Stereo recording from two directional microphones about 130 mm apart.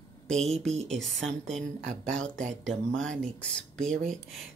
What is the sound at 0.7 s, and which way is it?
Speech, 60° right (ahead or behind).